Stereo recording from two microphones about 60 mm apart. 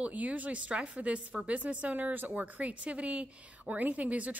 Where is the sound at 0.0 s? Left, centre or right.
Right.